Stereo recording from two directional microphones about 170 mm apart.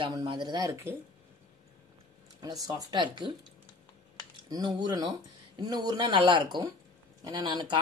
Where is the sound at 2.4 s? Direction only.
20° right (ahead or behind).